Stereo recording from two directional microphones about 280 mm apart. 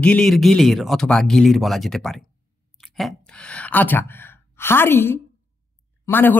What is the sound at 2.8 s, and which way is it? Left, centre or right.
Sigh, centre.